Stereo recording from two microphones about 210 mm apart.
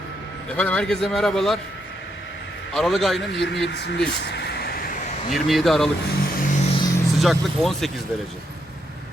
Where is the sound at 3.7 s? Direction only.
55° left (ahead or behind).